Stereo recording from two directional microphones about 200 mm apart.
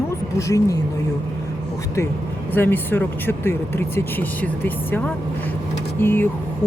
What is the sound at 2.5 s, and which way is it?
Speech, 10° left (ahead or behind).